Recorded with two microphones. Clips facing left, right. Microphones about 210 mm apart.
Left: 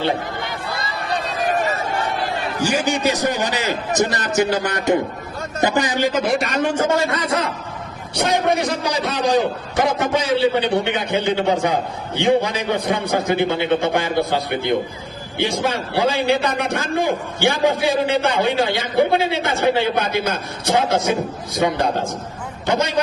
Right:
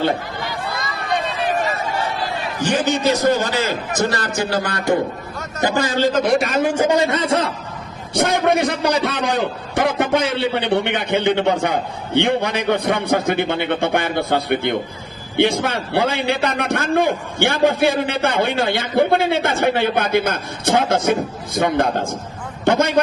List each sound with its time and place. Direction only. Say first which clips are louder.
1.4 s a sound: even; 40° left (ahead or behind)
2.6 s a man's voice: right 1 dB; 10° left (ahead or behind); by 7.5 s 30° right (ahead or behind)
8.1 s a man's voice: right 2 dB; 55° right (ahead or behind)